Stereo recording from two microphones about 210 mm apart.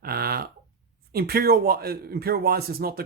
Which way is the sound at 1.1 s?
45° right (ahead or behind).